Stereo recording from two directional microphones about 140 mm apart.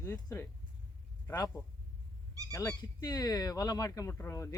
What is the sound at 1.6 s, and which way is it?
Speech, 25° left (ahead or behind).